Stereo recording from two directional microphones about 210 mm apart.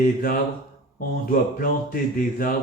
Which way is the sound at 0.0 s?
45° left (ahead or behind).